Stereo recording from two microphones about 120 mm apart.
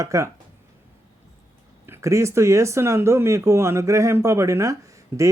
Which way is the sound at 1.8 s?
20° right (ahead or behind).